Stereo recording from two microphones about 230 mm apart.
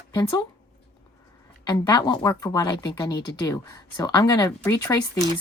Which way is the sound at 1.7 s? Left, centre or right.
Centre.